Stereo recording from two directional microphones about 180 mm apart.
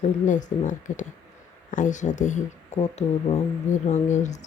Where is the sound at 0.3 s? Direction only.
45° left (ahead or behind).